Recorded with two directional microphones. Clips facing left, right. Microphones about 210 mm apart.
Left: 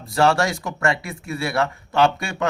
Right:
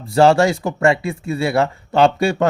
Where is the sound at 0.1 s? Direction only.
25° right (ahead or behind).